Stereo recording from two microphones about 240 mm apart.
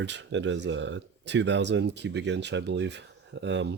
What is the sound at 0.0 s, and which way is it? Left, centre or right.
Speech, right.